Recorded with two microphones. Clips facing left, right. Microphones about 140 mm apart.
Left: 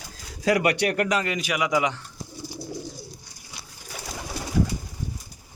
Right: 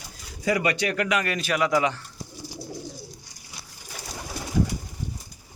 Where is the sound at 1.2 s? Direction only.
15° left (ahead or behind).